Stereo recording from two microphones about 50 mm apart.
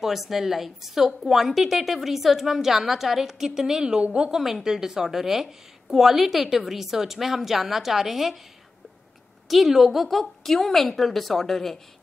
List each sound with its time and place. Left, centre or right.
0.0 s a woman's voice: centre; by 4.3 s right
4.3 s a woman's voice: centre
9.5 s a woman's voice: centre